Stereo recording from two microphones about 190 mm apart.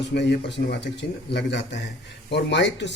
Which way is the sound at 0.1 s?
65° left (ahead or behind).